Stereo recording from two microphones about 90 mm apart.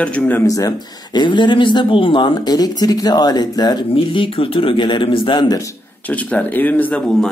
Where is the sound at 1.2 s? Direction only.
60° left (ahead or behind).